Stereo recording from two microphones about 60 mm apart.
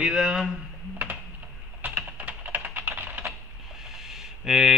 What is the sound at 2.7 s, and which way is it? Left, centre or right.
Typing, right.